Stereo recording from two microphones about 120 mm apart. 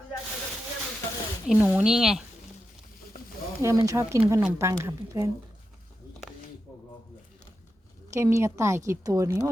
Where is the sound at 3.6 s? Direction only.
25° right (ahead or behind).